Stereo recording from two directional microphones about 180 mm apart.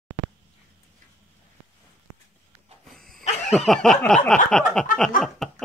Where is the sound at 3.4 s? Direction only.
Centre (ahead or behind).